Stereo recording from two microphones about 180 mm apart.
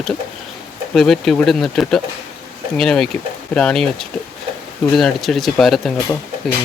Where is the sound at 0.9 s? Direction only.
Centre (ahead or behind).